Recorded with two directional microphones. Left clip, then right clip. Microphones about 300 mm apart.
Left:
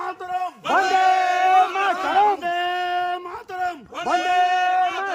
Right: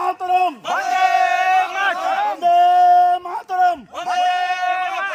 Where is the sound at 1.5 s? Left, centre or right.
Left.